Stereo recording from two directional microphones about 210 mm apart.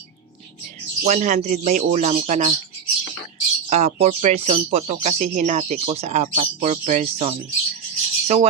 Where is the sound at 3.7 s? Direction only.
30° right (ahead or behind).